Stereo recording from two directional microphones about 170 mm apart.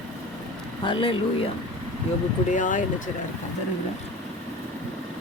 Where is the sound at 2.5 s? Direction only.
50° left (ahead or behind).